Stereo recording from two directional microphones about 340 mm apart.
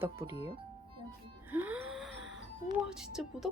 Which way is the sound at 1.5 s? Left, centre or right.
Centre.